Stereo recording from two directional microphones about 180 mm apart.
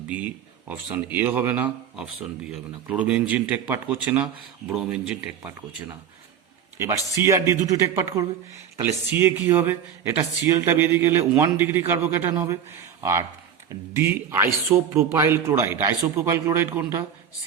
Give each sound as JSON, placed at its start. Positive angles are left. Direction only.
{"t": 0.1, "sound": "speech", "side_deg": -10}
{"t": 6.7, "sound": "speech", "side_deg": -15}